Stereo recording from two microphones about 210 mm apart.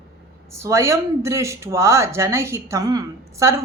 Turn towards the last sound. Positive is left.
turn(degrees=-15)  # may be behind; listen again after turning